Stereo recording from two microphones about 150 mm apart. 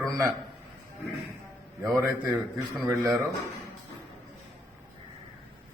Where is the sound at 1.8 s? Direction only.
20° right (ahead or behind).